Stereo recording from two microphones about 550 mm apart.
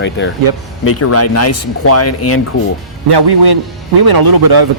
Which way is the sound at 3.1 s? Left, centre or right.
Right.